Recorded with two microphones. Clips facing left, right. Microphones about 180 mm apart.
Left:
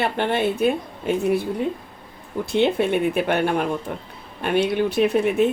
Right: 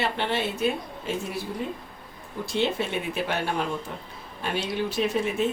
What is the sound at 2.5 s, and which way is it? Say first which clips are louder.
A woman's voice: left 7 dB; 60° left (ahead or behind).